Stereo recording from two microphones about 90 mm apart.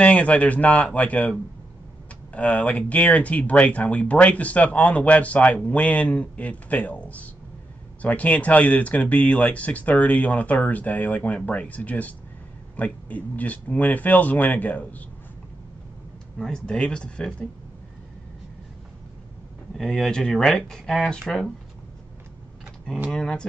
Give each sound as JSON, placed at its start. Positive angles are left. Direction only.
{"t": 0.0, "sound": "speech", "side_deg": 15}
{"t": 2.3, "sound": "speech", "side_deg": 15}
{"t": 16.3, "sound": "speech", "side_deg": 10}
{"t": 19.7, "sound": "speech", "side_deg": 5}
{"t": 23.1, "sound": "speech", "side_deg": 10}